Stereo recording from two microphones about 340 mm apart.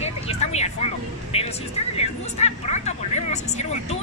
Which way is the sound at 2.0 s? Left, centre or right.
Centre.